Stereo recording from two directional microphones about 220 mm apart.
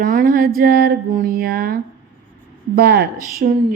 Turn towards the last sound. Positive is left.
turn(degrees=-45)  # may be behind; listen again after turning